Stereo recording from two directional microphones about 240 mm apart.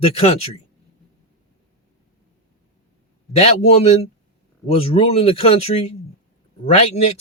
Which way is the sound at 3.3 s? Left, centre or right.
Left.